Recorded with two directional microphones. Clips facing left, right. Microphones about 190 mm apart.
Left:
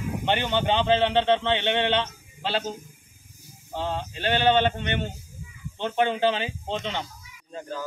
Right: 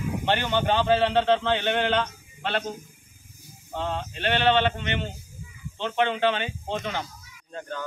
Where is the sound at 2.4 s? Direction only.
5° left (ahead or behind).